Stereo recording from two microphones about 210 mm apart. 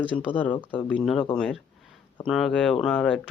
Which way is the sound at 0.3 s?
10° left (ahead or behind).